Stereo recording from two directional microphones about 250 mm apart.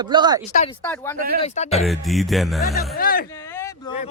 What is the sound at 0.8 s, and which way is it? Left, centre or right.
Speech, centre.